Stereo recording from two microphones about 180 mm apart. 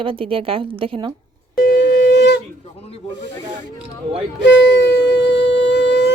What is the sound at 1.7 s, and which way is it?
Shofar, 70° left (ahead or behind).